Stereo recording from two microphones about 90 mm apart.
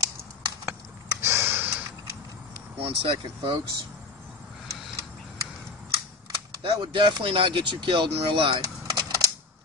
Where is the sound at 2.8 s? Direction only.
85° right.